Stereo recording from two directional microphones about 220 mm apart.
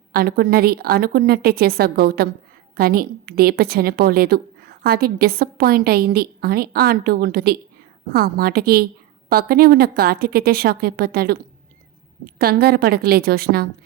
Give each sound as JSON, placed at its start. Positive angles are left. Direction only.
{"t": 0.1, "sound": "a woman's voice", "side_deg": -45}